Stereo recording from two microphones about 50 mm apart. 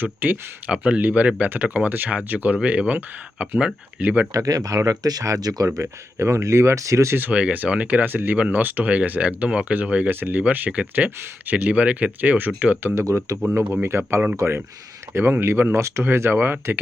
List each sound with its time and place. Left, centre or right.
0.0 s speech: right
0.7 s speech: right
4.4 s speech: right
7.3 s speech: right
8.0 s speech: right
10.1 s speech: right
12.9 s speech: right
13.8 s speech: right
14.3 s speech: right
15.1 s speech: right
15.7 s speech: right
16.0 s speech: right